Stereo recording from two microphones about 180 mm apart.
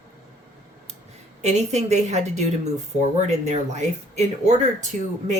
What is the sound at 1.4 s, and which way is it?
Speech, 40° right (ahead or behind).